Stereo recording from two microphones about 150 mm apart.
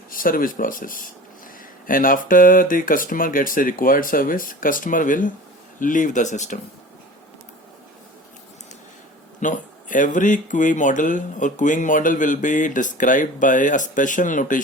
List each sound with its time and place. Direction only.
0.1 s speech: 70° left (ahead or behind)
9.4 s speech: 60° left (ahead or behind)